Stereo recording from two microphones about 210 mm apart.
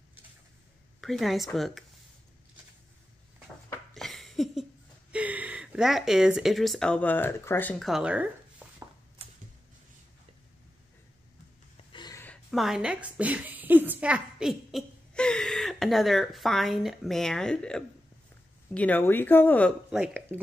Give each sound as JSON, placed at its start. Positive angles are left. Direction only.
{"t": 1.0, "sound": "speech", "side_deg": 0}
{"t": 3.7, "sound": "a sound", "side_deg": 0}
{"t": 5.1, "sound": "speech", "side_deg": -5}
{"t": 11.7, "sound": "gasp", "side_deg": 20}
{"t": 12.4, "sound": "a woman's voice", "side_deg": 0}
{"t": 19.9, "sound": "speech", "side_deg": -5}